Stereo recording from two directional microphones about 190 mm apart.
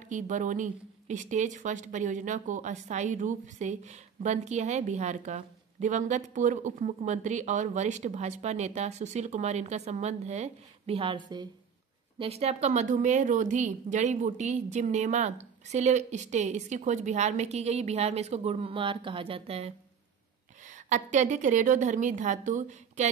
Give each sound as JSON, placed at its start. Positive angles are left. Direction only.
{"t": 0.1, "sound": "speech", "side_deg": -40}